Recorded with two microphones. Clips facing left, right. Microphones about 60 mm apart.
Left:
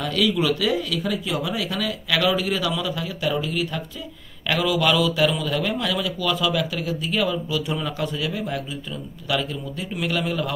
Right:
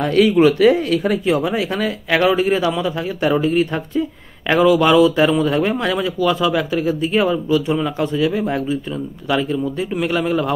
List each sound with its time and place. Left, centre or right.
0.0 s speech: right